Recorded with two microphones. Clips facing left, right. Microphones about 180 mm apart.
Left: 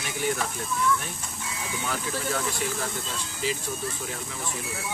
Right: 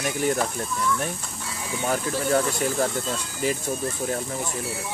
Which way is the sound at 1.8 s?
45° right (ahead or behind).